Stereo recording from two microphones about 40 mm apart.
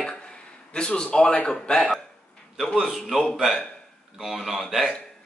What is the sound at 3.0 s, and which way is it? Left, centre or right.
Speech, centre.